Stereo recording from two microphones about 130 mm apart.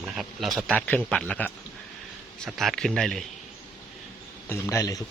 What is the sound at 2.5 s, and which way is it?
Speech, centre (ahead or behind).